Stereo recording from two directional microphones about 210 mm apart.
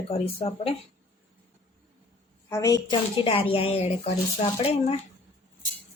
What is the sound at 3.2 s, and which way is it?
Speech, 25° left (ahead or behind).